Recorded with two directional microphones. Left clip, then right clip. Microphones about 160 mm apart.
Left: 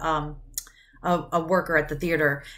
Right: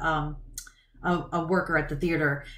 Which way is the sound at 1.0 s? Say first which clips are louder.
Left 4 dB; 10° left (ahead or behind).